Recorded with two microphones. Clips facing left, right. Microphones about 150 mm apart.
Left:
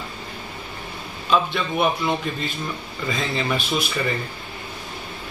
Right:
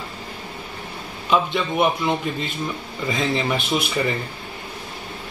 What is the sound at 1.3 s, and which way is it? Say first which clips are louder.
Speech: right 1 dB; 20° right (ahead or behind).